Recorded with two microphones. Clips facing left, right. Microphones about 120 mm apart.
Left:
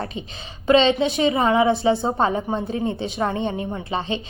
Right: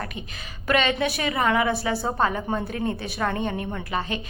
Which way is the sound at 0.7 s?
25° left (ahead or behind).